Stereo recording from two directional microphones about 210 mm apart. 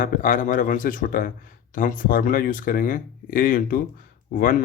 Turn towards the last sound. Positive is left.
turn(degrees=40)  # may be behind; listen again after turning